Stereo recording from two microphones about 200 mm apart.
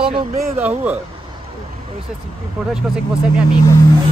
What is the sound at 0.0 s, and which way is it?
Speech, 25° right (ahead or behind).